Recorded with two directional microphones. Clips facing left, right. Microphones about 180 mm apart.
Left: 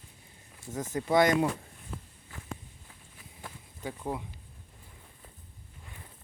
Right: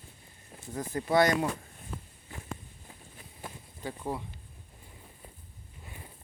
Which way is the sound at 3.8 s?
15° left (ahead or behind).